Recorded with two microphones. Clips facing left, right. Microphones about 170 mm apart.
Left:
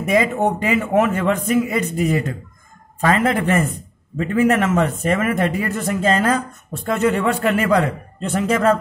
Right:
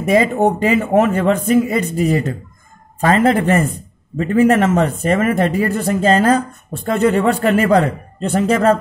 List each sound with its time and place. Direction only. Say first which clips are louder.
0.1 s speech: right 4 dB; 35° right (ahead or behind)